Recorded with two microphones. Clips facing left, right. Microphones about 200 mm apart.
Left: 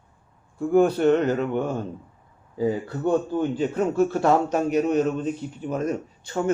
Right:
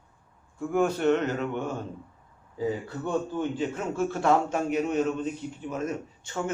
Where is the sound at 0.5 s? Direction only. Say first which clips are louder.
Left 7 dB; 35° left (ahead or behind).